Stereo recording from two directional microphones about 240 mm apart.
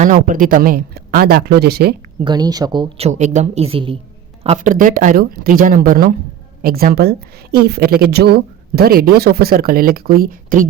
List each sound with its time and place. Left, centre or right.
0.0 s a woman's voice: right
2.2 s a woman's voice: centre; by 10.7 s right